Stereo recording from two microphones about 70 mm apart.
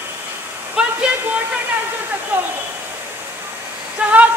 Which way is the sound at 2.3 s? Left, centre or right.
Right.